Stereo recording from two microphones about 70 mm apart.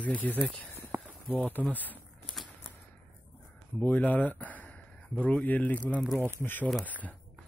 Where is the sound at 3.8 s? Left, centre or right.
Left.